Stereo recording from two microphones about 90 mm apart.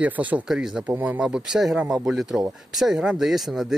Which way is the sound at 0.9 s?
15° right (ahead or behind).